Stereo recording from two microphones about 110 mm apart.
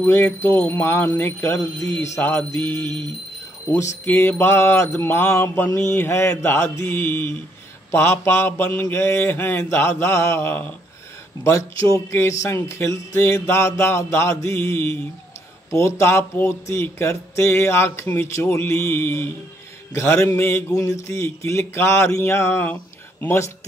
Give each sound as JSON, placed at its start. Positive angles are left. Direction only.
{"t": 0.0, "sound": "speech", "side_deg": 25}